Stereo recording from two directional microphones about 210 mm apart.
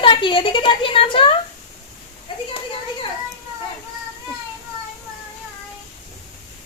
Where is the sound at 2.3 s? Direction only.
25° left (ahead or behind).